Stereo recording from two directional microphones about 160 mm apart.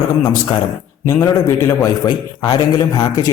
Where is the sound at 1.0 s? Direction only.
20° left (ahead or behind).